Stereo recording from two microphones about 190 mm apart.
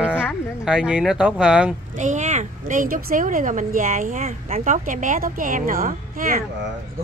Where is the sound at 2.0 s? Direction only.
40° right (ahead or behind).